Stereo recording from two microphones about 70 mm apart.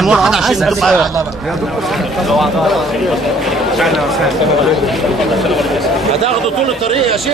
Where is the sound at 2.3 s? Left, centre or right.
Centre.